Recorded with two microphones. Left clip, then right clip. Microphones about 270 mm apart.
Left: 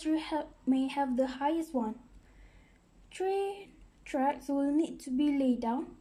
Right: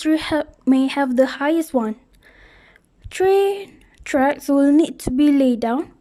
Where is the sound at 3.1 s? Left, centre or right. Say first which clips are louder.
Right 16 dB; right.